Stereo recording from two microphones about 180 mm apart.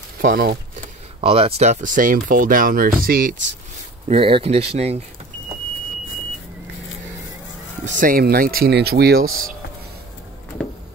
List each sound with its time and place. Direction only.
0.2 s speech: 55° right (ahead or behind)
1.2 s speech: 30° right (ahead or behind)
1.6 s speech: 40° right (ahead or behind)
4.1 s speech: 30° right (ahead or behind)
7.8 s speech: 45° right (ahead or behind)